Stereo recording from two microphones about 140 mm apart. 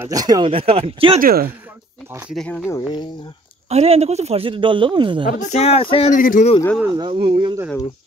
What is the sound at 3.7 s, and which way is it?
A man's voice, 50° right (ahead or behind).